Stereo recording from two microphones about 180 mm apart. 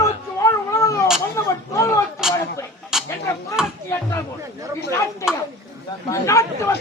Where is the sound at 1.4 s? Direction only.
15° left (ahead or behind).